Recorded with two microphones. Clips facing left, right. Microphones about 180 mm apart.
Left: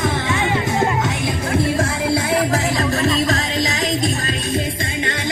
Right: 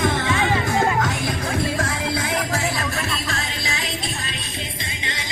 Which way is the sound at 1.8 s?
30° left (ahead or behind).